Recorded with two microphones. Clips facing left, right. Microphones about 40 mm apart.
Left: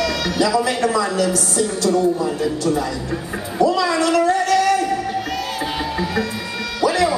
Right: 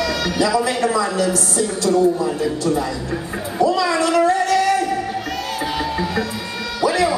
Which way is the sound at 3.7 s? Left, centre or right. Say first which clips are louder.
Even; centre.